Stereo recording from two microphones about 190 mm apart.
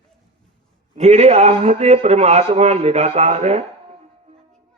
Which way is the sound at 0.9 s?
35° right (ahead or behind).